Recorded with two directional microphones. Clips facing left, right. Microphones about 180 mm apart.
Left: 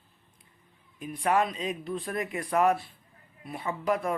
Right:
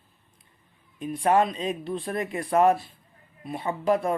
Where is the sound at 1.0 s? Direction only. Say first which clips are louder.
Right 4 dB; 30° right (ahead or behind).